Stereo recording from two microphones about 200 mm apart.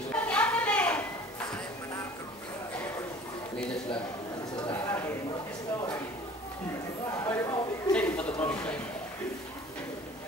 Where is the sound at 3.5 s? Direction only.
5° left (ahead or behind).